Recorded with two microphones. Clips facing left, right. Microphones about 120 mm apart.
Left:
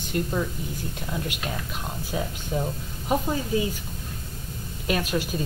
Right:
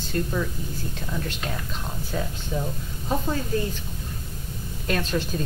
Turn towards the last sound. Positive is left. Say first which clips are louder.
# even
turn(degrees=10)  # may be behind; listen again after turning